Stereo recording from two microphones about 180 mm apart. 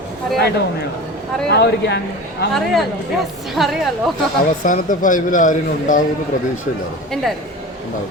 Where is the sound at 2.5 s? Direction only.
Centre (ahead or behind).